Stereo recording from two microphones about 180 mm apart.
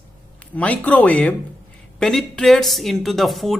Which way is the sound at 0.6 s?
10° left (ahead or behind).